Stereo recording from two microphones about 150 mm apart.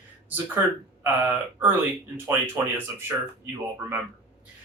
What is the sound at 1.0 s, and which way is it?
Speech, 15° right (ahead or behind).